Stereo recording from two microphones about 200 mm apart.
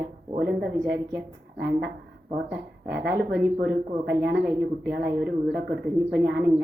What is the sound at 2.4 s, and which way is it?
A woman's voice, 55° right (ahead or behind).